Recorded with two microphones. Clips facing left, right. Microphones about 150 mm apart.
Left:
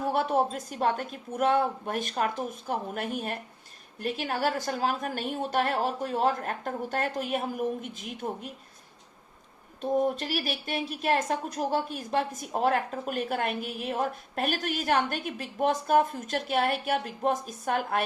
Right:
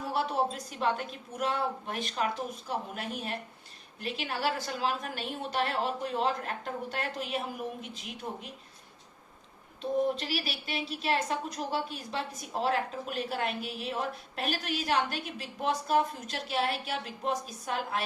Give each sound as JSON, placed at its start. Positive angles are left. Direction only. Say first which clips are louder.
{"t": 0.1, "sound": "speech", "louder": "left 3 dB", "side_deg": 50}
{"t": 9.8, "sound": "speech", "louder": "left 3 dB", "side_deg": 50}